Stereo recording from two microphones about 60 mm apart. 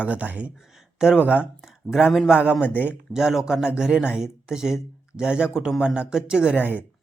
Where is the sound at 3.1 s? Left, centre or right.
Centre.